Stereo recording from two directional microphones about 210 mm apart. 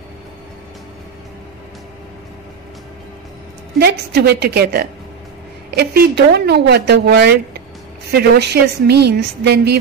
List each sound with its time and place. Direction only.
3.8 s a woman's voice: 50° right (ahead or behind)